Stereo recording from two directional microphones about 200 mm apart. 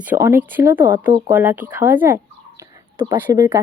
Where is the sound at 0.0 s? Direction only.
10° right (ahead or behind).